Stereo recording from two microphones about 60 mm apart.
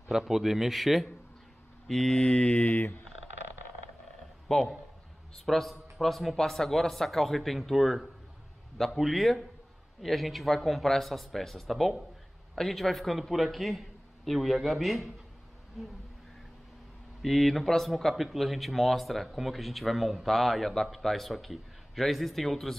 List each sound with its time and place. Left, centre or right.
0.1 s speech: centre
1.9 s mantra: centre
2.2 s mantra: centre
4.5 s a man's voice: centre
17.2 s speech: centre